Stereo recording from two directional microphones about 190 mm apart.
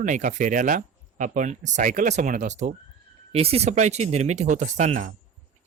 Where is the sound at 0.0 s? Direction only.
40° right (ahead or behind).